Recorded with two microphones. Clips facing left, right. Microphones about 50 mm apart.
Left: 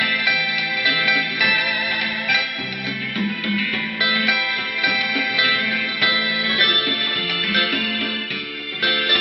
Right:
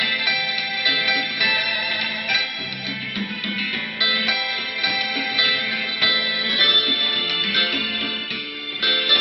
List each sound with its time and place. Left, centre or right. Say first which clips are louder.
0.0 s music: left 3 dB; left
1.4 s music: left 3 dB; centre
3.2 s music: left 5 dB; centre
6.0 s music: left 2 dB; centre
6.4 s music: even; left
8.8 s music: left 1 dB; centre